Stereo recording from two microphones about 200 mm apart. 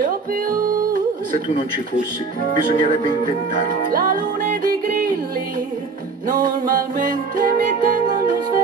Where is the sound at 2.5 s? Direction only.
40° right (ahead or behind).